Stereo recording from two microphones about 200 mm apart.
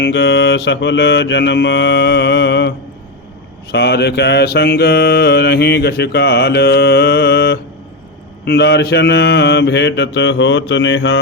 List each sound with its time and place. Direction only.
0.0 s mantra: 60° left (ahead or behind)